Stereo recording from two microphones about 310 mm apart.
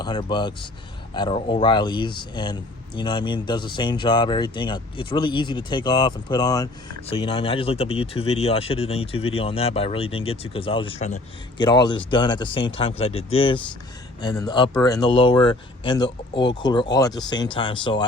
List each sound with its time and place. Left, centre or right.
0.0 s speech: centre